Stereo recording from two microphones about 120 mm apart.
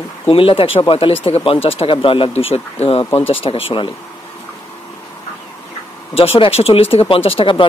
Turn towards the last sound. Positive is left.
turn(degrees=45)  # may be behind; listen again after turning